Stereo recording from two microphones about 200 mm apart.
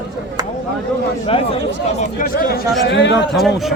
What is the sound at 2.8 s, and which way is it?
Speech, 60° left (ahead or behind).